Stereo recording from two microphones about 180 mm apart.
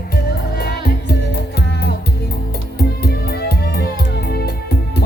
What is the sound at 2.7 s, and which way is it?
Music, 60° left (ahead or behind).